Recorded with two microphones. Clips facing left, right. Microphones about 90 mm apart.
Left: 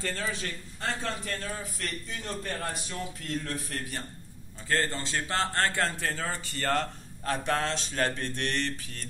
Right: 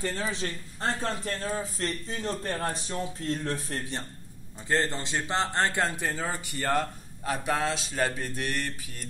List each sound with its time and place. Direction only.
0.0 s a man's voice: 15° right (ahead or behind)